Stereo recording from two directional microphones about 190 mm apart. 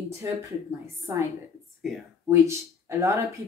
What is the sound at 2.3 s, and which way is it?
Speech, 15° right (ahead or behind).